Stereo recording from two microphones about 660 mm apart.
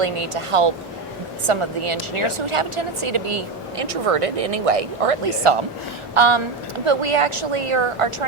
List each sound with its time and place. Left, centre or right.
0.0 s a woman's voice: right